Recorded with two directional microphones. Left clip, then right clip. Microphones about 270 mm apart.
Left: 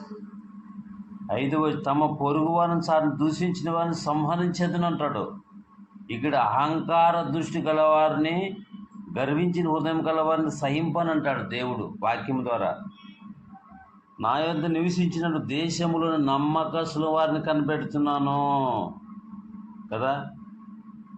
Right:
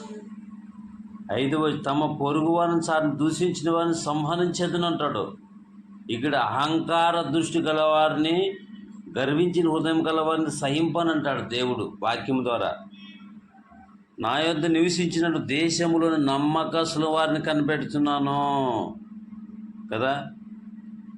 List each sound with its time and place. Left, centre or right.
1.3 s a man's voice: right
14.2 s a man's voice: right
19.9 s a man's voice: right